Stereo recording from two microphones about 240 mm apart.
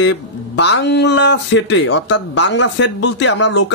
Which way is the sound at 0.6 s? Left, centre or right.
Left.